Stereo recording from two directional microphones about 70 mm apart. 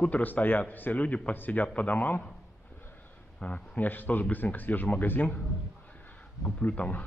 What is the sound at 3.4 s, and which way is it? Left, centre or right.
A man's voice, centre.